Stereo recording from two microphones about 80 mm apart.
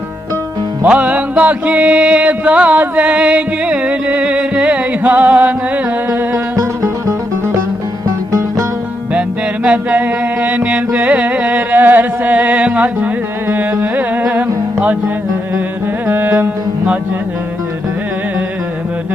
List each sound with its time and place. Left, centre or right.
0.9 s music: centre; by 8.6 s right
9.6 s music: centre